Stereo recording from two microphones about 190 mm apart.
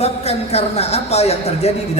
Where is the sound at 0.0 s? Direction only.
35° left (ahead or behind).